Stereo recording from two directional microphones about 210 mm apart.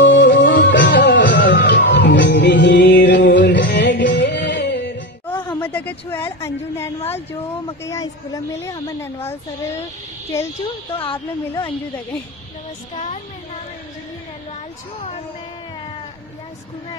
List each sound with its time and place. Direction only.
0.0 s music: 60° left (ahead or behind)
5.2 s music: 10° left (ahead or behind)
5.6 s a woman's voice: 10° left (ahead or behind)
11.0 s a woman's voice: 20° left (ahead or behind)
12.9 s speech: 35° left (ahead or behind)